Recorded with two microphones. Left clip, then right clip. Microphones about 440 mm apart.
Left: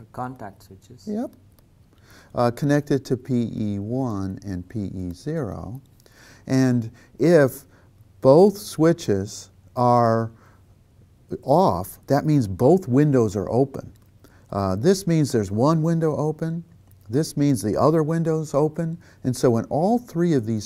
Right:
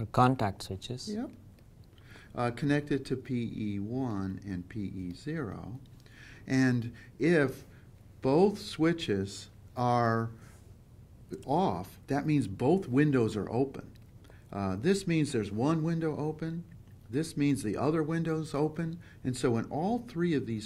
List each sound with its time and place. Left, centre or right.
0.1 s speech: right
2.3 s speech: left
11.8 s speech: left
14.5 s speech: left